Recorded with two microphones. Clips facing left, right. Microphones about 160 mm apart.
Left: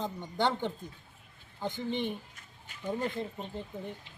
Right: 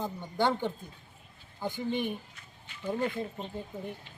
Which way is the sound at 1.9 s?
10° right (ahead or behind).